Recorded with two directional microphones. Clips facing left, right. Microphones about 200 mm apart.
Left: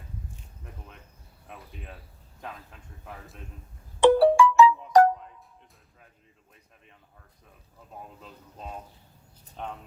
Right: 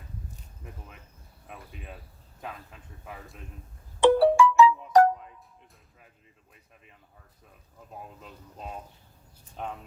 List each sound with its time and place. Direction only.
0.6 s a sound: 5° right (ahead or behind)
1.5 s speech: 5° right (ahead or behind)
4.0 s music: 50° left (ahead or behind)
8.2 s speech: 5° right (ahead or behind)